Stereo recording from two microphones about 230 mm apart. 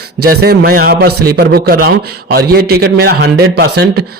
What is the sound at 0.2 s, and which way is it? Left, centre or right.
A man's voice, right.